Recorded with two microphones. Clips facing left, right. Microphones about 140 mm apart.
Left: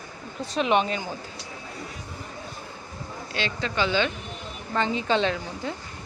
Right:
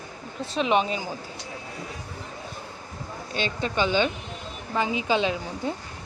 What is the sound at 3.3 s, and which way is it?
Speech, 15° right (ahead or behind).